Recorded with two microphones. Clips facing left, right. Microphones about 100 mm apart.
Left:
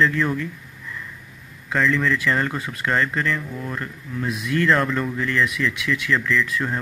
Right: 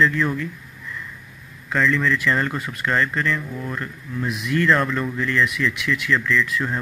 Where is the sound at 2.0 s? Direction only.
30° left (ahead or behind).